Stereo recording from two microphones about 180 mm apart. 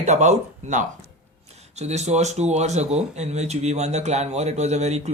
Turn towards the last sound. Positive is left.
turn(degrees=-40)  # may be behind; listen again after turning